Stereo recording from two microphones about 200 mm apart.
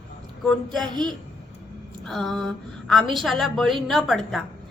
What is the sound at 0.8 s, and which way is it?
Speech, 20° right (ahead or behind).